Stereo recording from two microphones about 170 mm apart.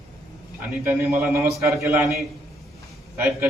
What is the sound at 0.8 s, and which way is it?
A man's voice, 10° right (ahead or behind).